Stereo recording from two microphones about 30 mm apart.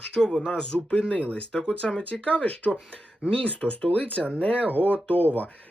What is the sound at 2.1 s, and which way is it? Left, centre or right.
Speech, left.